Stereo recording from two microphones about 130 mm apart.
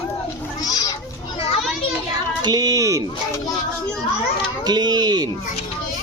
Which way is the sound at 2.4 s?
30° right (ahead or behind).